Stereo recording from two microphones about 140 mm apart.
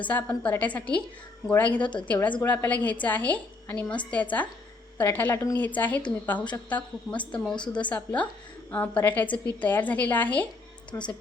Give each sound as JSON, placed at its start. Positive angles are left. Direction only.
{"t": 0.0, "sound": "a woman's voice", "side_deg": 10}
{"t": 7.5, "sound": "a woman's voice", "side_deg": 35}
{"t": 7.8, "sound": "a woman's voice", "side_deg": 10}